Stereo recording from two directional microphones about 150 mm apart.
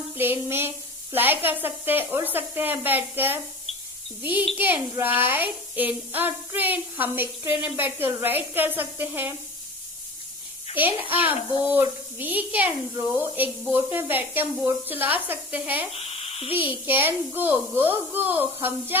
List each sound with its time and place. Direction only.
0.2 s a woman's voice: 15° right (ahead or behind)
11.1 s a woman's voice: 10° right (ahead or behind)
11.3 s speech: 35° left (ahead or behind)
11.7 s a woman's voice: 10° right (ahead or behind)
15.9 s speech: 40° left (ahead or behind)
16.8 s a woman's voice: 15° right (ahead or behind)